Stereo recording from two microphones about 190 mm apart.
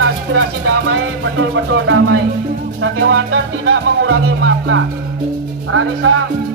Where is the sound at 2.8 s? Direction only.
90° right.